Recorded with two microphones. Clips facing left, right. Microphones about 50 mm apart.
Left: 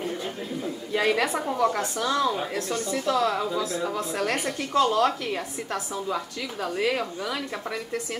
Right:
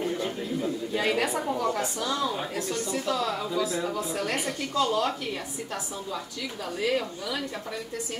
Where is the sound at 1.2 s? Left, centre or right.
Left.